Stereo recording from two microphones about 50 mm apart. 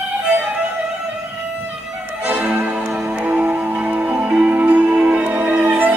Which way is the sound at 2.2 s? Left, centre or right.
Right.